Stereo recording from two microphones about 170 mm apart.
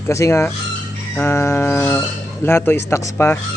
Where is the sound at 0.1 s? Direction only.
15° left (ahead or behind).